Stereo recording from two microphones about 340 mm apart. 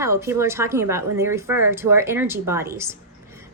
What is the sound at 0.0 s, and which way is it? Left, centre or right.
A woman's voice, centre.